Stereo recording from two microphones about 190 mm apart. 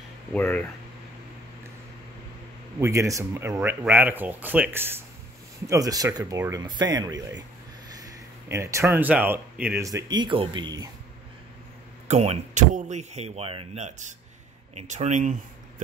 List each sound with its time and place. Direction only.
0.3 s speech: 10° left (ahead or behind)
2.8 s speech: 15° right (ahead or behind)
12.1 s speech: 35° right (ahead or behind)